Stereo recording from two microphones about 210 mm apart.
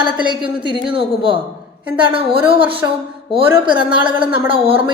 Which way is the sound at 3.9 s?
25° right (ahead or behind).